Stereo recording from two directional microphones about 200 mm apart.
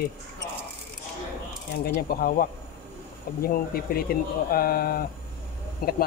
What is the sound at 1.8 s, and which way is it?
Speech, 50° left (ahead or behind).